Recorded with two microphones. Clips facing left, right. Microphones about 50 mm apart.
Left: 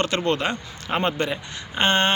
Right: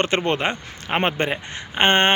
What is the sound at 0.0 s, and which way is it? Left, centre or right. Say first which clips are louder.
Speech: right 2 dB; right.